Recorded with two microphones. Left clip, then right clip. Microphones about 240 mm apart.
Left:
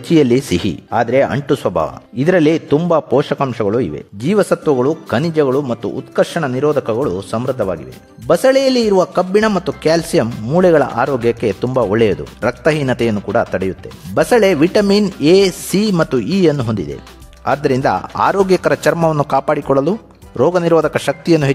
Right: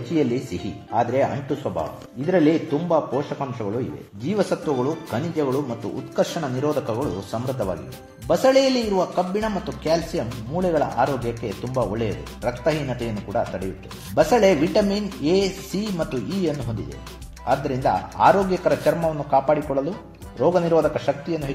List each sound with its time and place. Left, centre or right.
0.1 s a man's voice: left